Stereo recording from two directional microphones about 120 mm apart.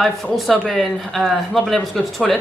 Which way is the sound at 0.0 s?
Centre (ahead or behind).